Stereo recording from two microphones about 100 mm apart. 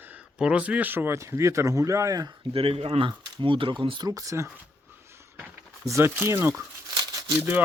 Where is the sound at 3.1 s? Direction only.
55° right (ahead or behind).